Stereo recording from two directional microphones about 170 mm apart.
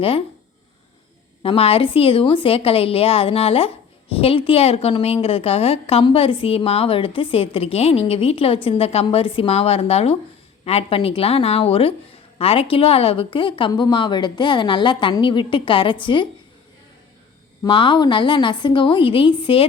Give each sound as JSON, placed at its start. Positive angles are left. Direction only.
{"t": 1.4, "sound": "a woman's voice", "side_deg": 35}
{"t": 17.7, "sound": "a woman's voice", "side_deg": 30}